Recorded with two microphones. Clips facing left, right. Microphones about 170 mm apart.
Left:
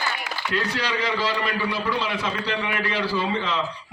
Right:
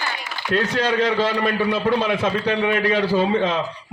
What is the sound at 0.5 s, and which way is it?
A man's voice, 55° right (ahead or behind).